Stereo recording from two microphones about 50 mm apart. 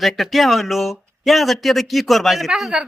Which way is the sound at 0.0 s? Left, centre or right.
Centre.